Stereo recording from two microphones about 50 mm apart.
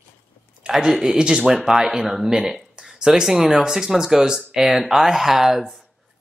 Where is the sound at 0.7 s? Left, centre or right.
Centre.